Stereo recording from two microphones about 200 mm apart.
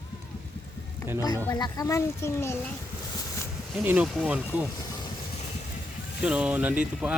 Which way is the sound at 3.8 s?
10° right (ahead or behind).